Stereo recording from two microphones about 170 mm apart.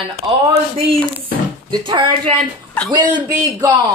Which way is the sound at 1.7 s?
25° right (ahead or behind).